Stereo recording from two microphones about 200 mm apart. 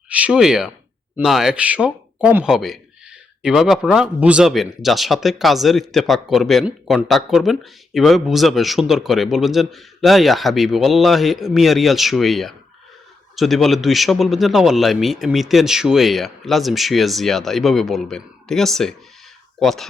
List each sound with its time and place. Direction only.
0.1 s speech: 5° right (ahead or behind)